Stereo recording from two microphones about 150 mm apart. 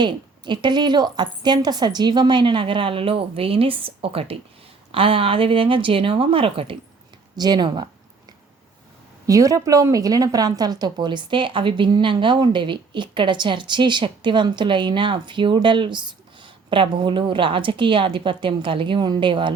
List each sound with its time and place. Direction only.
0.0 s speech: 30° right (ahead or behind)
9.2 s speech: 20° right (ahead or behind)